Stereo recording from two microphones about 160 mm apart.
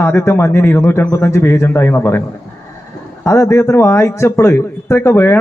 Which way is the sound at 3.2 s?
20° left (ahead or behind).